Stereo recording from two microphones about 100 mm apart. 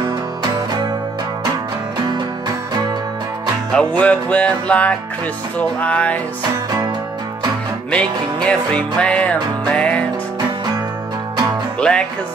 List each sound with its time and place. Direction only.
2.0 s music: 45° right (ahead or behind)
4.0 s music: 15° left (ahead or behind)
7.9 s music: 10° left (ahead or behind)
11.8 s music: 10° left (ahead or behind)